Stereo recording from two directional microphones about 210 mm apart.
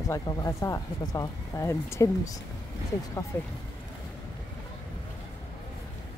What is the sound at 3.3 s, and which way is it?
Speech, 5° left (ahead or behind).